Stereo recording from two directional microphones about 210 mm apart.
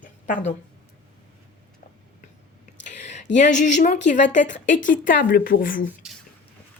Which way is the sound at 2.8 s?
35° left (ahead or behind).